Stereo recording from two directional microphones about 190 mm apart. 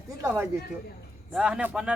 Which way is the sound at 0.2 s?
10° right (ahead or behind).